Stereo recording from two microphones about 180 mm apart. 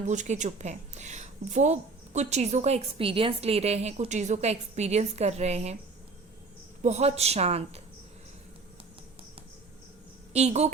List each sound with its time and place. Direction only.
0.1 s a woman's voice: 40° right (ahead or behind)
6.8 s a woman's voice: 35° right (ahead or behind)
10.3 s a woman's voice: 40° right (ahead or behind)